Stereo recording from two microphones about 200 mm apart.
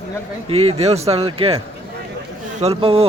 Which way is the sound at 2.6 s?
30° right (ahead or behind).